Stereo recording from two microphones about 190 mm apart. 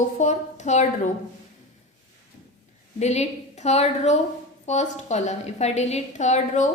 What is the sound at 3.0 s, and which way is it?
A woman's voice, 35° left (ahead or behind).